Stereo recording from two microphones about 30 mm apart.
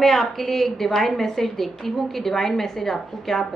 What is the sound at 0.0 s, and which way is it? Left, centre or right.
A woman's voice, centre.